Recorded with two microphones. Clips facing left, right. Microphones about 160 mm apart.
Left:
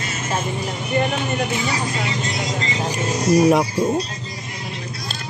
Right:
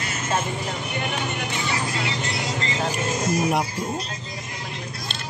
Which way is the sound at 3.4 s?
90° left.